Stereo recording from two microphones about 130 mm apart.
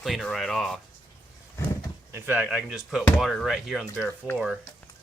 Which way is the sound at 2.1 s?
15° right (ahead or behind).